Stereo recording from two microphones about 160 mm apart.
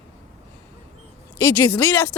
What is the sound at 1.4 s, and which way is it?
Speech, 20° left (ahead or behind).